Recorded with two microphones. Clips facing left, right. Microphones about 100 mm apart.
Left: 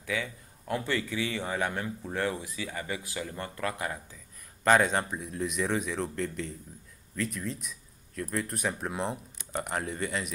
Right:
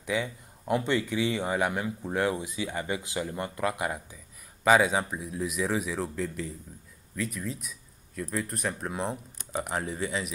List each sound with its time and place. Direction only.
0.0 s speech: 20° right (ahead or behind)
4.6 s speech: 5° right (ahead or behind)